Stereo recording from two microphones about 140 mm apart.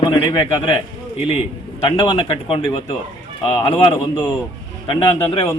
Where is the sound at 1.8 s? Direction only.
35° left (ahead or behind).